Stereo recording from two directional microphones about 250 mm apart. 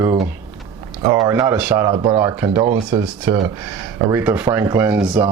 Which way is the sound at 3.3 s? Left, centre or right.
Centre.